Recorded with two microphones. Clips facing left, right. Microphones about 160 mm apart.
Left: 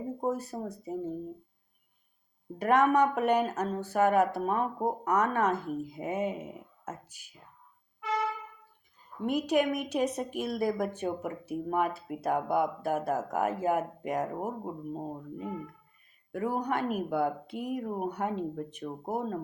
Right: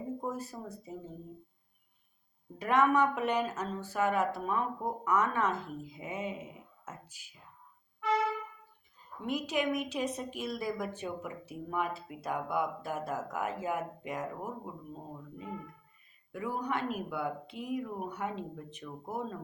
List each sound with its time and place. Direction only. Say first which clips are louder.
0.2 s speech: left 6 dB; 45° left (ahead or behind)
2.6 s a woman's voice: left 3 dB; 50° left (ahead or behind)
9.2 s a woman's voice: left 5 dB; 50° left (ahead or behind)